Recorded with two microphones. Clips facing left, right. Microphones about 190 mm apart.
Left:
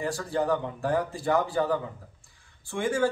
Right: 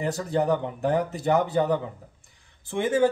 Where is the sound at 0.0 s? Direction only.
20° right (ahead or behind).